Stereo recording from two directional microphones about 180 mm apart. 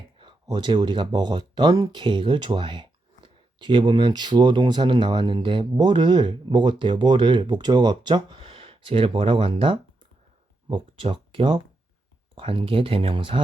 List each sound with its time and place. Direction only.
0.2 s speech: 25° right (ahead or behind)